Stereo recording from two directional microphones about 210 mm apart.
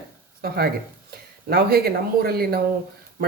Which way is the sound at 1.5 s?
45° right (ahead or behind).